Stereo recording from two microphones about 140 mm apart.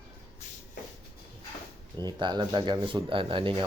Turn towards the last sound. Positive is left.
turn(degrees=-40)  # may be behind; listen again after turning